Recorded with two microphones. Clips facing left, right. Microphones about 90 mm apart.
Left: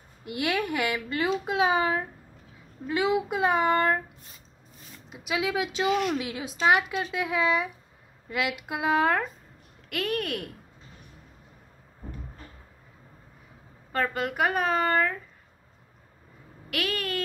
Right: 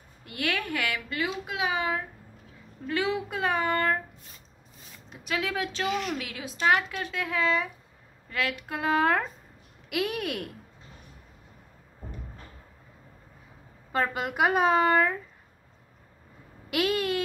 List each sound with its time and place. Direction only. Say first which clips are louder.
0.2 s speech: left 3 dB; 20° left (ahead or behind)
1.2 s a child's voice: left 6 dB; 30° left (ahead or behind)
2.9 s a woman's voice: left 3 dB; 15° left (ahead or behind)
5.1 s a woman's voice: left 2 dB; 10° left (ahead or behind)
9.8 s speech: even; 10° right (ahead or behind)
13.9 s speech: even; 15° right (ahead or behind)
16.7 s speech: right 4 dB; 20° right (ahead or behind)